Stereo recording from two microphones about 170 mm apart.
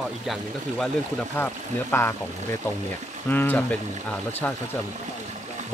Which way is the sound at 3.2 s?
10° left (ahead or behind).